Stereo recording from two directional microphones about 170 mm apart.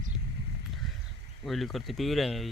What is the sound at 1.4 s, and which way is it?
Speech, centre (ahead or behind).